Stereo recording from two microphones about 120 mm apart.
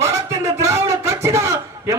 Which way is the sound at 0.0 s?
25° right (ahead or behind).